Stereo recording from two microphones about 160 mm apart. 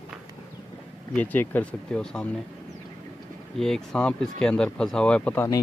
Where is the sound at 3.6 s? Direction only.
5° left (ahead or behind).